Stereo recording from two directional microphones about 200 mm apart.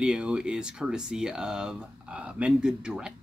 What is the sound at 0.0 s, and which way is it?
Speech, 5° right (ahead or behind).